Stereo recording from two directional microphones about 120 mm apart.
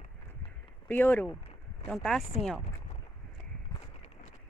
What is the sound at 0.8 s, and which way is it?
Speech, 15° left (ahead or behind).